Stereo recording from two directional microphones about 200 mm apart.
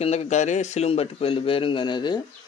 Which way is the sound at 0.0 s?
30° left (ahead or behind).